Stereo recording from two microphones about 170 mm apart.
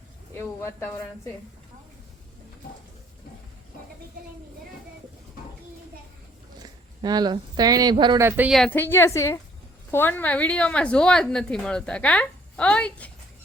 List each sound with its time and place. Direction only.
0.3 s a woman's voice: 15° left (ahead or behind)
6.6 s speech: 25° right (ahead or behind)
8.2 s speech: 10° right (ahead or behind)
8.5 s a woman's voice: 10° left (ahead or behind)